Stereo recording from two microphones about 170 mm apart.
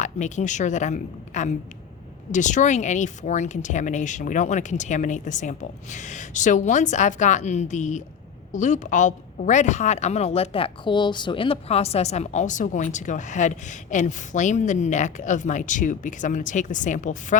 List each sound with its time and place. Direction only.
0.0 s a woman's voice: 45° left (ahead or behind)